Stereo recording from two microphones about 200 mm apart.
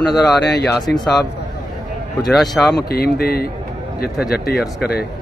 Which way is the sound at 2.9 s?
50° left (ahead or behind).